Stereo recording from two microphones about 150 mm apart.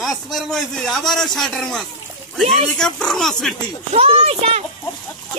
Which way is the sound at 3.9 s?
40° right (ahead or behind).